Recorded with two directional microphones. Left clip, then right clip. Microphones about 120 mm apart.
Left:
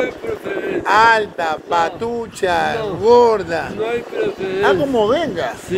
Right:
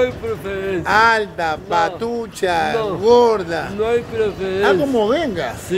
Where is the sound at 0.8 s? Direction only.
20° right (ahead or behind).